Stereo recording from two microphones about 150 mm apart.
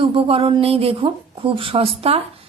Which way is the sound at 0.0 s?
40° right (ahead or behind).